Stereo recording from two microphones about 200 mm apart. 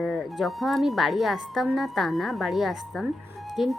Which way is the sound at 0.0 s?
Centre (ahead or behind).